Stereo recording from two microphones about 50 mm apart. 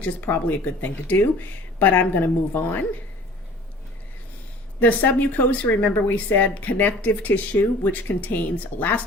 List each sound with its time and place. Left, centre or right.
0.0 s speech: left
4.8 s speech: left